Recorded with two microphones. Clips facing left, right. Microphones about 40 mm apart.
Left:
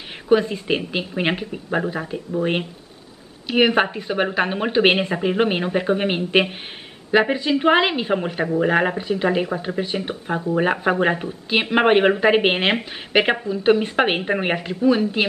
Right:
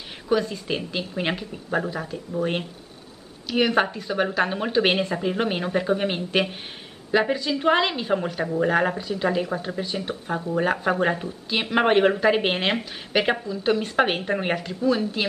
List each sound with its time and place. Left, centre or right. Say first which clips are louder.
0.3 s speech: left 6 dB; left
3.4 s speech: left 4 dB; left